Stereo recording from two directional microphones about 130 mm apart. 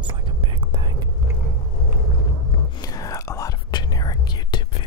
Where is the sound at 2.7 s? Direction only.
30° left (ahead or behind).